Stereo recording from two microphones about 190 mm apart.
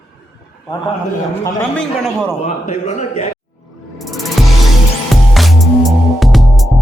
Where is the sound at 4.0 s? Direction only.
Centre (ahead or behind).